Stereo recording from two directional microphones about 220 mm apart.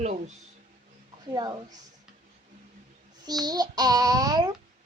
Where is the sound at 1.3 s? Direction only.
15° right (ahead or behind).